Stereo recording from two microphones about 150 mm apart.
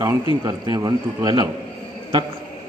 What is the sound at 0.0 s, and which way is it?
A man's voice, 25° right (ahead or behind).